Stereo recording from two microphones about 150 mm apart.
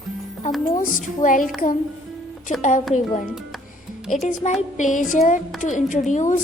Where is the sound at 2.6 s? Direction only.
55° left (ahead or behind).